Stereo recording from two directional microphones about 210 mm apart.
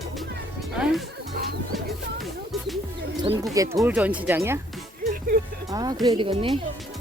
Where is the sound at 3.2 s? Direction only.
20° right (ahead or behind).